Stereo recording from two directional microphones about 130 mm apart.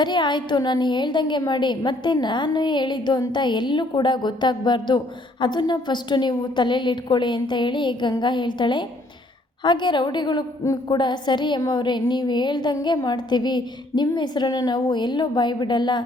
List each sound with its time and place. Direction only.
0.0 s a woman's voice: 35° left (ahead or behind)